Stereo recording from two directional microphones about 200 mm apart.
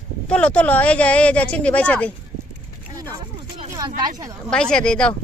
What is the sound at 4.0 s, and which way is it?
Speech, 20° right (ahead or behind).